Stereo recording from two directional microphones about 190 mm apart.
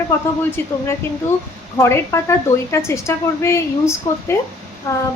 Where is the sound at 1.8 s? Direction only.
15° left (ahead or behind).